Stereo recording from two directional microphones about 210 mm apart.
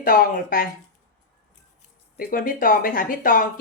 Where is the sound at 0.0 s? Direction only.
45° left (ahead or behind).